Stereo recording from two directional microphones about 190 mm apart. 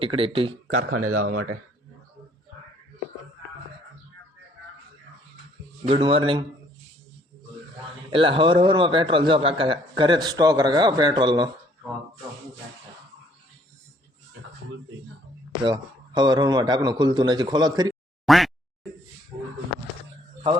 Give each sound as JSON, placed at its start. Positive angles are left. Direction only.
{"t": 0.0, "sound": "a man's voice", "side_deg": -30}
{"t": 0.8, "sound": "speech", "side_deg": -45}
{"t": 5.9, "sound": "a man's voice", "side_deg": -30}
{"t": 8.1, "sound": "a man's voice", "side_deg": -30}
{"t": 15.6, "sound": "a man's voice", "side_deg": -20}
{"t": 18.3, "sound": "a sound", "side_deg": 0}